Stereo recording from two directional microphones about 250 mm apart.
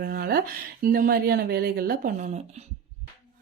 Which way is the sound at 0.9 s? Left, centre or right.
Right.